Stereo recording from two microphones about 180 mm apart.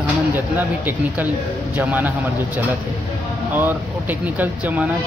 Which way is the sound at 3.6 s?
10° right (ahead or behind).